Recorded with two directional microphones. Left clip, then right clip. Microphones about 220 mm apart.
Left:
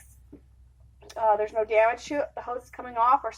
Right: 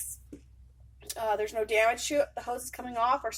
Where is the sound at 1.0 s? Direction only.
10° left (ahead or behind).